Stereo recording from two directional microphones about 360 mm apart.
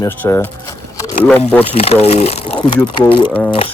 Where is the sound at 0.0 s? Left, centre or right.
Centre.